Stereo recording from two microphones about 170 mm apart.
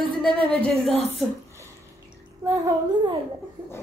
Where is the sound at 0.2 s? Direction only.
5° left (ahead or behind).